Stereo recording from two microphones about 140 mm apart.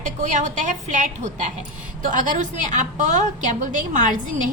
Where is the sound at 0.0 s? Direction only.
60° right (ahead or behind).